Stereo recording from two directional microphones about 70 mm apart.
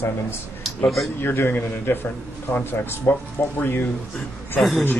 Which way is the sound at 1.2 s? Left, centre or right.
Left.